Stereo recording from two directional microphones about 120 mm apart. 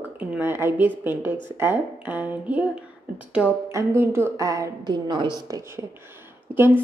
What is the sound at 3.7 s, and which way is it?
A woman's voice, 25° right (ahead or behind).